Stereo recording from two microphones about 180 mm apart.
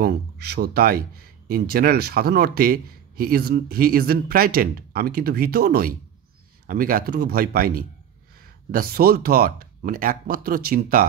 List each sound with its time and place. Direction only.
0.0 s speech: 60° right (ahead or behind)